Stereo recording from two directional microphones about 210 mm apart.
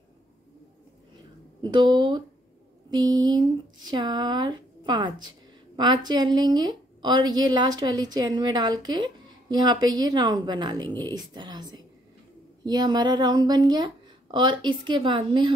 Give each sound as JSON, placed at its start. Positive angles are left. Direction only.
{"t": 1.6, "sound": "a woman's voice", "side_deg": -20}